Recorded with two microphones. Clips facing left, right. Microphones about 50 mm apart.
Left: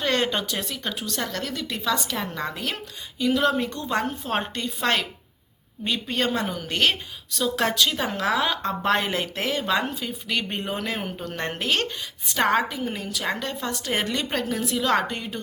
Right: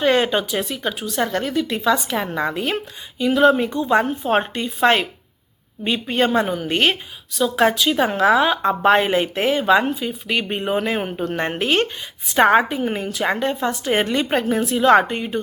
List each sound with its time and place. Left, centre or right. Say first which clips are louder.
0.0 s speech: right 7 dB; centre
7.3 s speech: right 6 dB; centre; by 15.4 s right